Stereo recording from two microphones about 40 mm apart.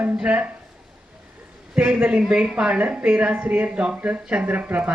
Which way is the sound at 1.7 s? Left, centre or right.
Right.